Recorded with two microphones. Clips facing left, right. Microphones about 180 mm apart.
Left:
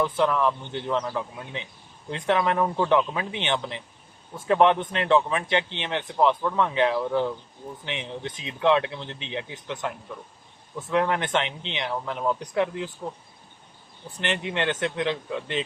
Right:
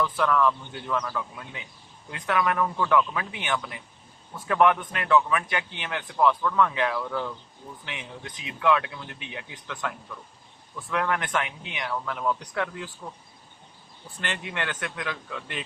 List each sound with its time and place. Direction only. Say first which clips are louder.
0.0 s a man's voice: left 1 dB; 20° left (ahead or behind)
14.2 s a man's voice: left 5 dB; 20° left (ahead or behind)